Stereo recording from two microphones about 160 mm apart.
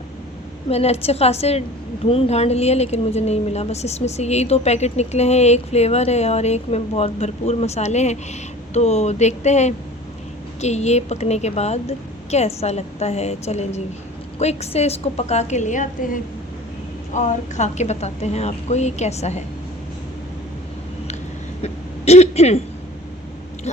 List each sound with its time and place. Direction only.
0.7 s a woman's voice: 40° left (ahead or behind)
21.6 s speech: 40° left (ahead or behind)